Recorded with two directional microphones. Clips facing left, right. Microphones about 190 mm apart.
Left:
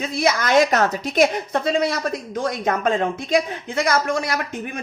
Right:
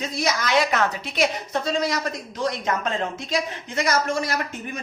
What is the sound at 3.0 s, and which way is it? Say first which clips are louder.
Speech: left 6 dB; 55° left (ahead or behind).